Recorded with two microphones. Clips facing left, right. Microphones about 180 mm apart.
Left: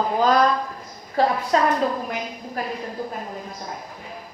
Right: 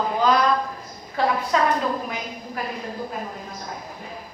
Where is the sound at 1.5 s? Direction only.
35° left (ahead or behind).